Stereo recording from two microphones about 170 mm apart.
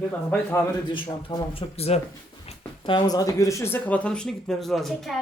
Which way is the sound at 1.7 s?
35° left (ahead or behind).